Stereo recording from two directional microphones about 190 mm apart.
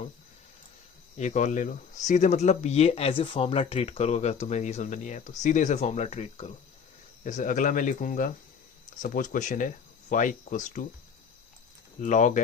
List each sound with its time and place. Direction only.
1.2 s speech: 40° left (ahead or behind)
11.9 s speech: 40° left (ahead or behind)